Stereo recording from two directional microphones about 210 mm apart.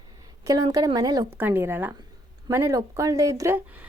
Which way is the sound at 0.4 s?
15° right (ahead or behind).